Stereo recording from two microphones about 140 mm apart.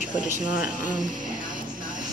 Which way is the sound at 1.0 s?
70° right (ahead or behind).